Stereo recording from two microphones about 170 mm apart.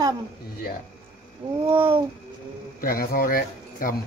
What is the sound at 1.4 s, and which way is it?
Speech, 25° right (ahead or behind).